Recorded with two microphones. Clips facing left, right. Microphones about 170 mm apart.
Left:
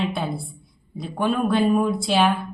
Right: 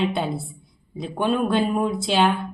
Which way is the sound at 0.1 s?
Centre (ahead or behind).